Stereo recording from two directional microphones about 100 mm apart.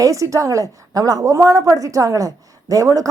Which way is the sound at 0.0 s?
35° right (ahead or behind).